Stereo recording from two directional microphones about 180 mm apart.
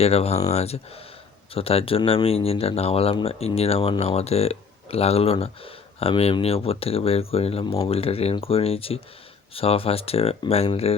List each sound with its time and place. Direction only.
0.0 s speech: 35° left (ahead or behind)